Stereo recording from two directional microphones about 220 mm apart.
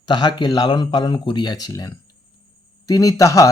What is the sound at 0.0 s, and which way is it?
Speech, 20° left (ahead or behind).